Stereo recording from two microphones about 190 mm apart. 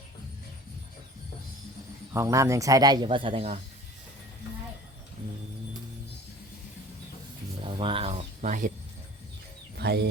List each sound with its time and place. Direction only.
2.1 s speech: 15° right (ahead or behind); by 3.6 s 30° right (ahead or behind)
7.6 s a sound: 30° right (ahead or behind)
9.7 s speech: 60° right (ahead or behind)